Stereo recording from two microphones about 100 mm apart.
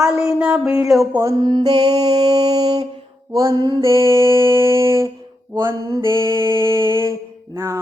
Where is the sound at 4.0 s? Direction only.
30° right (ahead or behind).